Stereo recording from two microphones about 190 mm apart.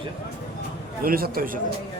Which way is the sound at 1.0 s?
50° right (ahead or behind).